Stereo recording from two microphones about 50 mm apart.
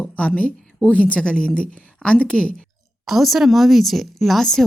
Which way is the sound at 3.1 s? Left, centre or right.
Centre.